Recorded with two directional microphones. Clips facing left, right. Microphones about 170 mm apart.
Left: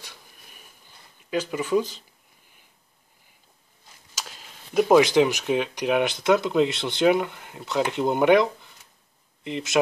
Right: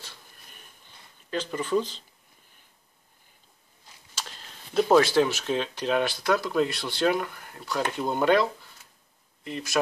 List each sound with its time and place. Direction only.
0.0 s a sound: 15° left (ahead or behind)
1.3 s speech: 10° left (ahead or behind)
4.1 s speech: 5° left (ahead or behind)